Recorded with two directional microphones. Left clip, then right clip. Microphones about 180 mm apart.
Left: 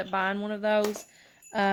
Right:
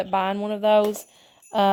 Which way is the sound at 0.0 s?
35° right (ahead or behind).